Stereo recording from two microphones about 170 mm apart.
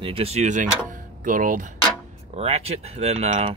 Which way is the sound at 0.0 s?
35° right (ahead or behind).